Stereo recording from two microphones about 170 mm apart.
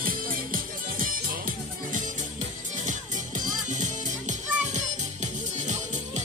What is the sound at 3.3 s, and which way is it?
Music, 45° right (ahead or behind).